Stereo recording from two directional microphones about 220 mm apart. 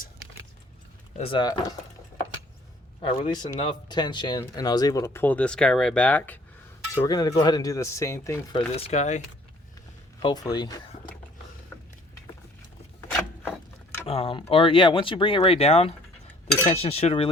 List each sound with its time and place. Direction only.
1.1 s speech: 25° left (ahead or behind)
3.0 s speech: 25° left (ahead or behind)
8.5 s speech: 30° left (ahead or behind)
10.2 s speech: 15° left (ahead or behind)
11.7 s a sound: 10° left (ahead or behind)
13.1 s zipper: 5° left (ahead or behind)
14.1 s speech: 25° left (ahead or behind)